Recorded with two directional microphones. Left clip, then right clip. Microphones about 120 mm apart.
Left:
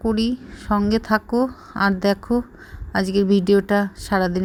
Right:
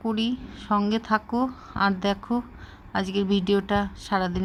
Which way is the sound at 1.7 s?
50° left (ahead or behind).